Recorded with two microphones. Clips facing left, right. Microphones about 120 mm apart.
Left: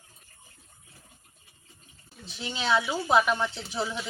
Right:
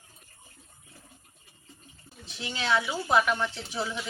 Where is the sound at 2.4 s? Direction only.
20° left (ahead or behind).